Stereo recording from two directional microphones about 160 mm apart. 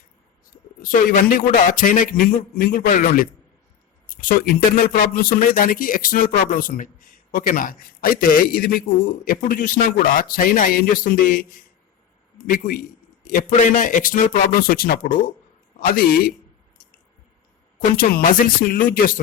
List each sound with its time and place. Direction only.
0.8 s a man's voice: 60° left (ahead or behind)
17.7 s a man's voice: 60° left (ahead or behind)